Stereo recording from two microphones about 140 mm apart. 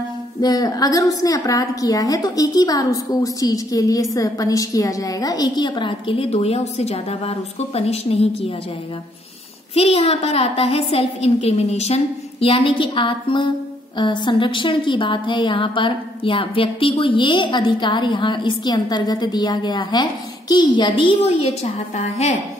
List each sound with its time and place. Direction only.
0.4 s a woman's voice: 25° left (ahead or behind); by 8.5 s 45° left (ahead or behind)
9.8 s a woman's voice: 45° left (ahead or behind)
21.3 s a woman's voice: 50° left (ahead or behind)